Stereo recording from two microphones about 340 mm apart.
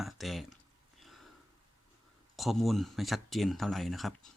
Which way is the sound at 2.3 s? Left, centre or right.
Centre.